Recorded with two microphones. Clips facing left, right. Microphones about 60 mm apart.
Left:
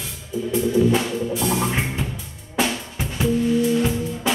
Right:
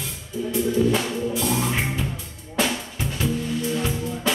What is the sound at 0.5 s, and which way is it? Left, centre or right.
Music, centre.